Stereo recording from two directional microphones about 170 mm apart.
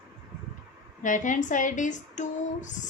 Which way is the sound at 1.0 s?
50° left (ahead or behind).